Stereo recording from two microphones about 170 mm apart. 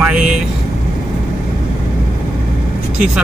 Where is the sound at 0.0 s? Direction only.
5° right (ahead or behind).